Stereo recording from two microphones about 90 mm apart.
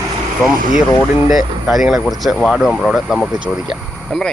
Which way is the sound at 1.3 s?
Centre (ahead or behind).